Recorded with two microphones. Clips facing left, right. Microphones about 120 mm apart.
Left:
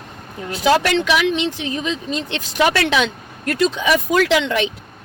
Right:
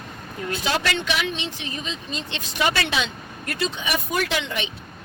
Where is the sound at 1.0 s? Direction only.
90° left.